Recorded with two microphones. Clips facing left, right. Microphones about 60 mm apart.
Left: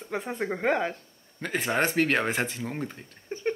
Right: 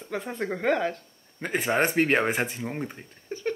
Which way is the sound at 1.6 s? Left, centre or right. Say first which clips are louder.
Right 2 dB; centre.